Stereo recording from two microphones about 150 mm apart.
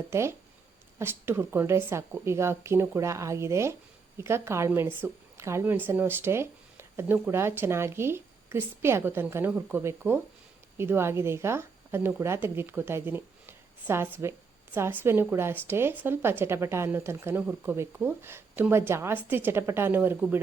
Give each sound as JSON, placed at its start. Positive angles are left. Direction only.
{"t": 0.1, "sound": "a woman's voice", "side_deg": -15}